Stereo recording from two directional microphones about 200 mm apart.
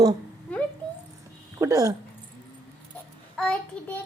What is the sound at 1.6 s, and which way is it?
Speech, 15° right (ahead or behind).